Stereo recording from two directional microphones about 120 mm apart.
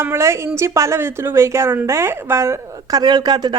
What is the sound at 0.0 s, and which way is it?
A woman's voice, 20° right (ahead or behind).